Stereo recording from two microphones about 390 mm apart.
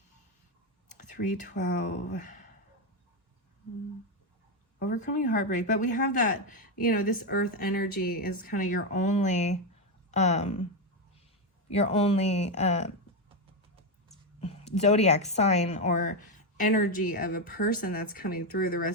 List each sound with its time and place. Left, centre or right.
1.1 s speech: centre
4.8 s a woman's voice: centre
11.7 s a woman's voice: centre
14.4 s a woman's voice: centre